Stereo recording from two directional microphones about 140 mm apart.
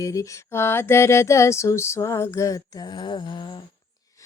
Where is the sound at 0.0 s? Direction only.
25° left (ahead or behind).